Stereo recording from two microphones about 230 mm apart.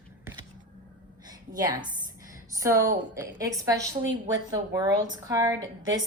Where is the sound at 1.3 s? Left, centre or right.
Centre.